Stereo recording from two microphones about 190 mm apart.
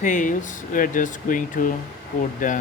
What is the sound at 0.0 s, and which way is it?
Speech, 40° left (ahead or behind).